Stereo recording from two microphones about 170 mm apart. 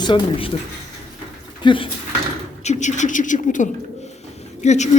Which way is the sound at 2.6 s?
45° left (ahead or behind).